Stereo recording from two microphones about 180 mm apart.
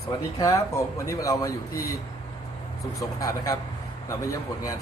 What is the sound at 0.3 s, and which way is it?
Speech, 15° left (ahead or behind).